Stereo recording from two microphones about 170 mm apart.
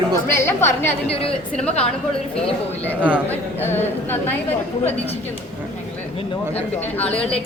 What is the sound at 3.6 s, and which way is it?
Speech, 10° left (ahead or behind).